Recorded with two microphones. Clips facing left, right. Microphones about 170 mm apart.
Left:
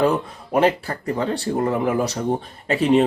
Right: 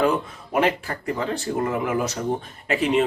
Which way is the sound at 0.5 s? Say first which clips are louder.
Left 3 dB; 35° left (ahead or behind).